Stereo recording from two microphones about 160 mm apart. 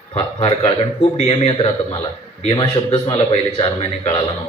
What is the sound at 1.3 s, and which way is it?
A man's voice, 35° left (ahead or behind).